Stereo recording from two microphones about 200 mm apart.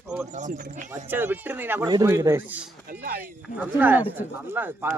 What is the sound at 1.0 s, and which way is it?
Speech, 10° right (ahead or behind).